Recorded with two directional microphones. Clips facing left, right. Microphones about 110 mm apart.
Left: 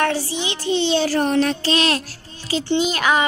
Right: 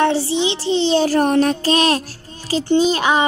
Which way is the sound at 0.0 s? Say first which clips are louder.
Right 5 dB; 25° right (ahead or behind).